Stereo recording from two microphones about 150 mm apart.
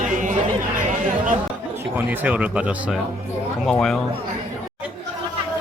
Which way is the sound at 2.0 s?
10° right (ahead or behind).